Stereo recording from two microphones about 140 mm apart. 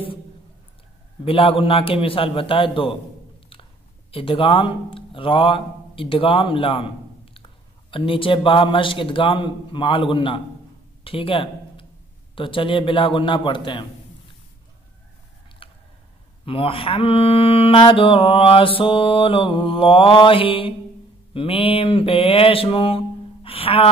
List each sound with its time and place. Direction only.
1.2 s mantra: 40° left (ahead or behind)
4.1 s a man's voice: 40° left (ahead or behind)
7.9 s mantra: 40° left (ahead or behind)
11.1 s speech: 40° left (ahead or behind)
12.4 s mantra: 40° left (ahead or behind)
15.6 s a sound: 40° left (ahead or behind)
16.4 s mantra: 40° left (ahead or behind)